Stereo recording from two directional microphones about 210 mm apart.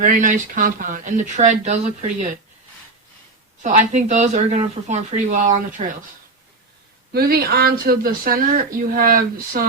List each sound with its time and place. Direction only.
0.0 s speech: 40° right (ahead or behind)
3.6 s speech: 35° right (ahead or behind)
7.1 s speech: 45° right (ahead or behind)